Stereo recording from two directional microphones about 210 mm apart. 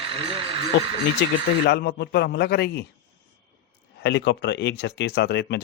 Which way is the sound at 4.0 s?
55° left (ahead or behind).